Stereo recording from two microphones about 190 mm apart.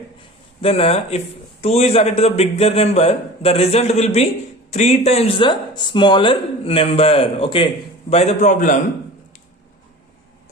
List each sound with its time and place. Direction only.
0.6 s a man's voice: 30° left (ahead or behind)